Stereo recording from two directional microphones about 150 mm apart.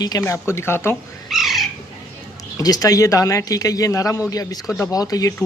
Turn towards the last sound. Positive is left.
turn(degrees=25)  # may be behind; listen again after turning